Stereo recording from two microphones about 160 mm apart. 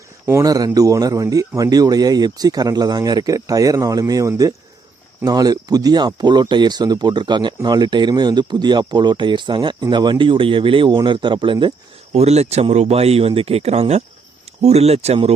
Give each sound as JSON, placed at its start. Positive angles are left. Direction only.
{"t": 0.3, "sound": "speech", "side_deg": -20}
{"t": 12.1, "sound": "speech", "side_deg": -40}